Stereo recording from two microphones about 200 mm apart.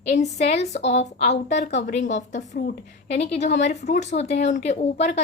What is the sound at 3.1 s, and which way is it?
A woman's voice, 30° left (ahead or behind).